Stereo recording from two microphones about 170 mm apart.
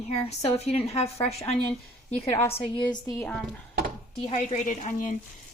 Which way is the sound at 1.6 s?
5° left (ahead or behind).